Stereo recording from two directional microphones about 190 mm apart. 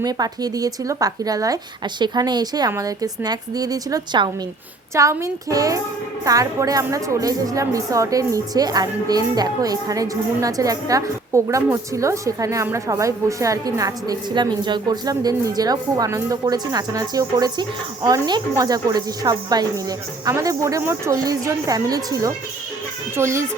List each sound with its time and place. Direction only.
0.0 s a woman's voice: 20° right (ahead or behind)